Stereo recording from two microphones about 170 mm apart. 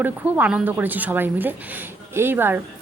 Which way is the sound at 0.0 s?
10° right (ahead or behind).